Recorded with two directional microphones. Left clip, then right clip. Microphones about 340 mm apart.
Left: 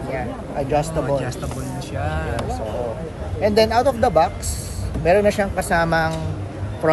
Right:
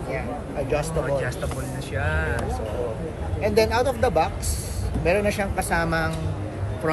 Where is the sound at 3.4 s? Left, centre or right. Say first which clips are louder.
Left 5 dB; left.